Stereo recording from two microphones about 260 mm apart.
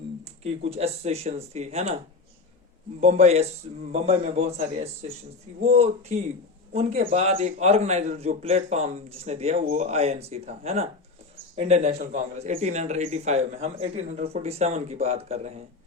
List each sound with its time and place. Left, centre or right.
0.4 s a man's voice: right
3.0 s a man's voice: right